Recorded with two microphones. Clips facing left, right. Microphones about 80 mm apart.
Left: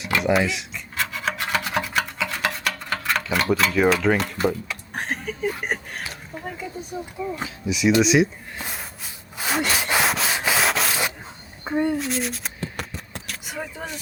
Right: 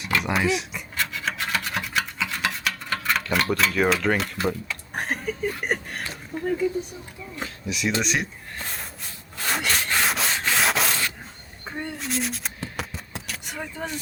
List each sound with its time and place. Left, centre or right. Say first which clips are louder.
0.0 s a sound: left 3 dB; centre
0.9 s rub: left 2 dB; centre
4.9 s a sound: right 1 dB; centre
7.4 s speech: left 6 dB; centre
9.4 s sawing: left 2 dB; centre
10.0 s rub: left 2 dB; centre
10.3 s sanding: left 2 dB; centre
10.6 s rub: left 1 dB; centre
11.6 s a child's voice: left 11 dB; centre
11.9 s a sound: left 3 dB; centre